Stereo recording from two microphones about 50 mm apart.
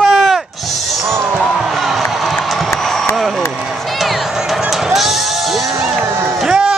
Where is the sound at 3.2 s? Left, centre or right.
Centre.